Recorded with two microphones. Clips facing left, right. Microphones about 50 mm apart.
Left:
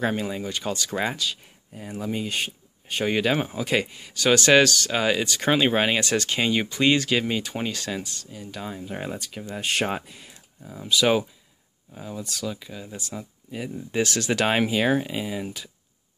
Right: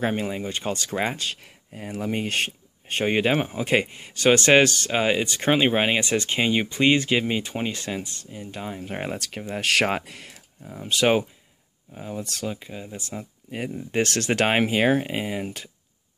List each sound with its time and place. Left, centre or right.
0.0 s speech: right
3.0 s speech: right
8.8 s speech: right
9.6 s speech: right
10.9 s speech: right